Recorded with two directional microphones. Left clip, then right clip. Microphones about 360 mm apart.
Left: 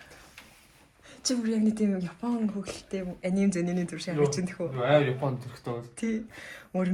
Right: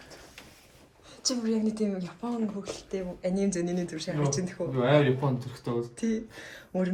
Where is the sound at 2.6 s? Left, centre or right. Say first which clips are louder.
Right 1 dB; centre.